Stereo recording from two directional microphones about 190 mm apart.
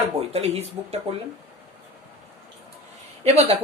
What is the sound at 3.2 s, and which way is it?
Speech, 35° right (ahead or behind).